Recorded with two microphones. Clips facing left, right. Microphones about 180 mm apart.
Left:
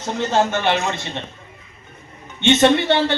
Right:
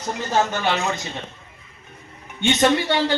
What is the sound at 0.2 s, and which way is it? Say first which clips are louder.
Speech: left 3 dB; 25° left (ahead or behind).